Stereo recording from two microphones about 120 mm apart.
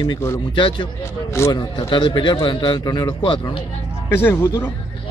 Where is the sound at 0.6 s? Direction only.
45° left (ahead or behind).